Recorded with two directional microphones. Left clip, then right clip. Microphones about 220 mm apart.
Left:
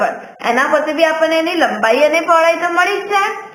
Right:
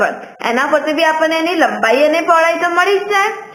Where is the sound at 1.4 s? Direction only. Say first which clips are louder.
Right 1 dB; 20° right (ahead or behind).